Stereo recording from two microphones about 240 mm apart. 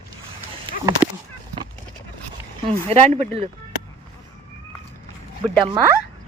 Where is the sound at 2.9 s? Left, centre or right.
Right.